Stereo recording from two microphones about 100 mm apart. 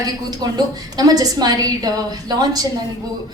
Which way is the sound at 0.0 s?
40° right (ahead or behind).